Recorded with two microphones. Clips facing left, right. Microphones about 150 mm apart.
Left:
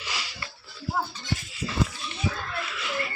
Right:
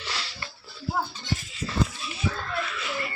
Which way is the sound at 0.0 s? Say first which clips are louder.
Right 1 dB; 10° left (ahead or behind).